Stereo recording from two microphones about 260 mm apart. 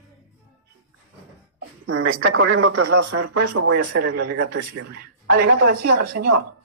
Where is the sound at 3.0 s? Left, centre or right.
Right.